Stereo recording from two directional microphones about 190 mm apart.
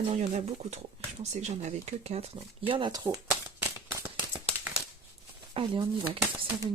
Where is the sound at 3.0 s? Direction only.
10° right (ahead or behind).